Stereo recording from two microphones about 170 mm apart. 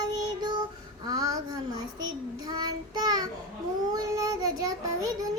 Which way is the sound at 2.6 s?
25° right (ahead or behind).